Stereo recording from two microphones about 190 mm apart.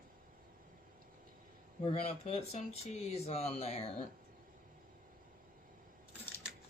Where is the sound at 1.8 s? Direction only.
35° left (ahead or behind).